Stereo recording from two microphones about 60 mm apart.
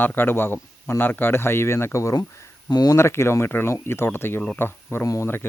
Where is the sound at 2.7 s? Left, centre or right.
Left.